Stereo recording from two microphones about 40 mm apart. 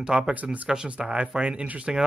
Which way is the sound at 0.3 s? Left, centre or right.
Right.